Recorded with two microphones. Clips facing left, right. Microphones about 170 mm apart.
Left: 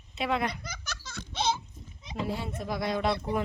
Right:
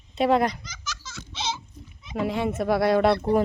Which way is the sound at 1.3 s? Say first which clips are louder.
Left 3 dB; 55° left (ahead or behind).